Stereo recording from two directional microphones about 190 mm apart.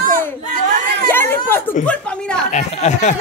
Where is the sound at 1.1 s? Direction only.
10° left (ahead or behind).